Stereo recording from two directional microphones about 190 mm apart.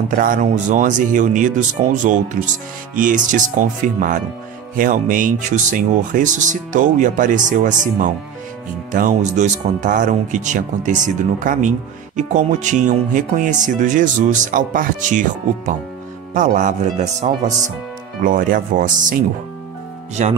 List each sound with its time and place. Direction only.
0.1 s speech: 45° right (ahead or behind)